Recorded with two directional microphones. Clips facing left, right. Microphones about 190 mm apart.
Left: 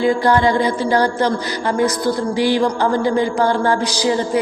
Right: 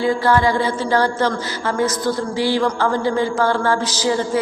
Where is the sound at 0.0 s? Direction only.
15° left (ahead or behind).